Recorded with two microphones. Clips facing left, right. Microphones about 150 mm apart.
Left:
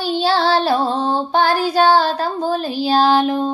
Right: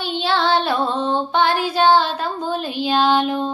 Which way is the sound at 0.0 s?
40° left (ahead or behind).